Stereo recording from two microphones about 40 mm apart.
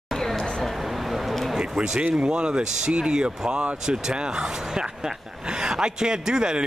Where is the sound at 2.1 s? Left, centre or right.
Right.